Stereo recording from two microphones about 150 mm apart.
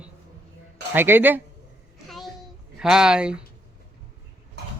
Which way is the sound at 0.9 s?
15° right (ahead or behind).